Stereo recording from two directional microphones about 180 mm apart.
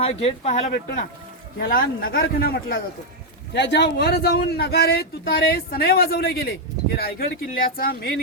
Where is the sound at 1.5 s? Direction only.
55° left (ahead or behind).